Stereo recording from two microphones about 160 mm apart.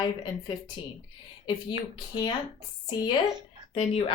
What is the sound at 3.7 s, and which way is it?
Speech, 45° left (ahead or behind).